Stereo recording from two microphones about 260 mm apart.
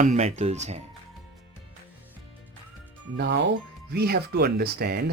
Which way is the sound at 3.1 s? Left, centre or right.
Right.